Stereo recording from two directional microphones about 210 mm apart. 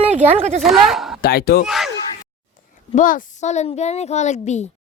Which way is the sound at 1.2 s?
45° left (ahead or behind).